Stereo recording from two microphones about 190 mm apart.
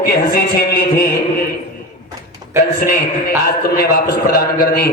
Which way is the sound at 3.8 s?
50° left (ahead or behind).